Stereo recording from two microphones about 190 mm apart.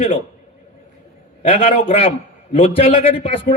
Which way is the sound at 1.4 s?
30° left (ahead or behind).